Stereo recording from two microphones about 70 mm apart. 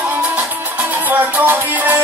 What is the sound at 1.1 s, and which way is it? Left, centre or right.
Music, right.